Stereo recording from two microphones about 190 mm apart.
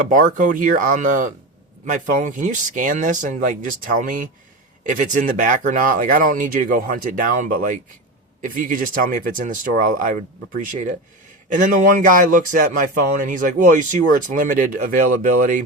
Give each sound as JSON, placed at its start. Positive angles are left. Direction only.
{"t": 0.1, "sound": "a man's voice", "side_deg": -45}